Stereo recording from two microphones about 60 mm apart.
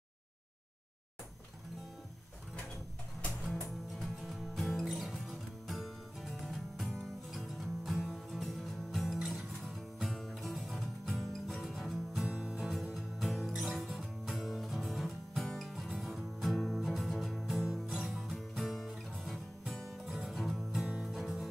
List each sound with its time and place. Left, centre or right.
4.0 s music: centre
12.3 s music: centre
20.8 s music: centre
21.1 s music: centre